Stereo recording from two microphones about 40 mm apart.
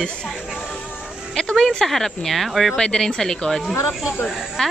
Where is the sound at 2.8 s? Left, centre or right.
Centre.